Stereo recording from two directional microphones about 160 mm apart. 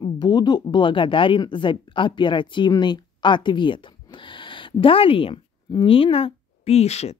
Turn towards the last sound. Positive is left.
turn(degrees=40)  # may be behind; listen again after turning